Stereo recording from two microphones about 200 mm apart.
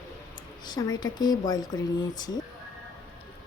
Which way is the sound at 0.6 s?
20° left (ahead or behind).